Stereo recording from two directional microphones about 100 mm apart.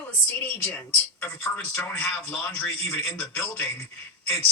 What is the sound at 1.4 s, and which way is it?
Speech, 20° left (ahead or behind).